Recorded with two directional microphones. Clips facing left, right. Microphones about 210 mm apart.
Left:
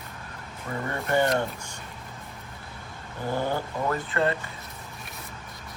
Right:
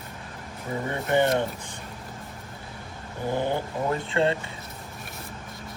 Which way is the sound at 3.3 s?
20° right (ahead or behind).